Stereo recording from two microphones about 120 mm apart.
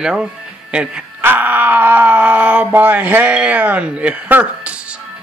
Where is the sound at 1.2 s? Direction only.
15° right (ahead or behind).